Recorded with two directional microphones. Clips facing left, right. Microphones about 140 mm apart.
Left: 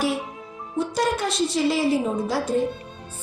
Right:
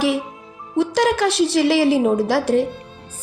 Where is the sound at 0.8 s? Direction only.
90° right.